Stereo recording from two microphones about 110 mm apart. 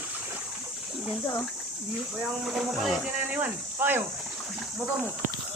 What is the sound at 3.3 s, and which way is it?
Speech, 15° right (ahead or behind).